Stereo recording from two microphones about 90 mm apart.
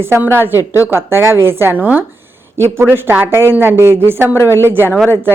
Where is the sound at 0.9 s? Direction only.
25° right (ahead or behind).